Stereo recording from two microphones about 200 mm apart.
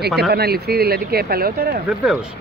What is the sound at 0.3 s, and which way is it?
Speech, 50° right (ahead or behind).